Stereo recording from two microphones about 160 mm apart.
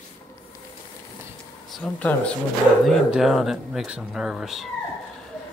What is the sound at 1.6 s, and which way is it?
Speech, 5° left (ahead or behind).